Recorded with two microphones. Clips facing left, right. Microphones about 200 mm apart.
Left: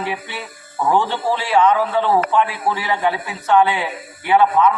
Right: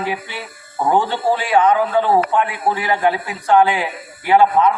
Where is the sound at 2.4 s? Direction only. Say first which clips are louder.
Right 2 dB; 25° right (ahead or behind).